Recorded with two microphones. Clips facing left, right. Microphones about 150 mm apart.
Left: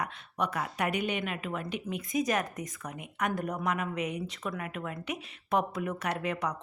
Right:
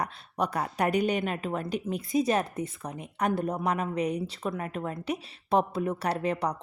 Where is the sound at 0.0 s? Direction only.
35° right (ahead or behind).